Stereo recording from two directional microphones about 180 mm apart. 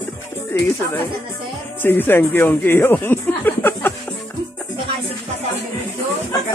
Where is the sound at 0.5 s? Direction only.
15° left (ahead or behind).